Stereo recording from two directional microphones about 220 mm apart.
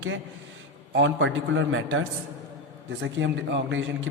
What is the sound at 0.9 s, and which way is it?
Speech, 60° right (ahead or behind).